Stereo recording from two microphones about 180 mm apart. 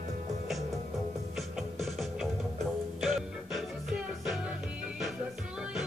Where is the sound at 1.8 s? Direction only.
Centre (ahead or behind).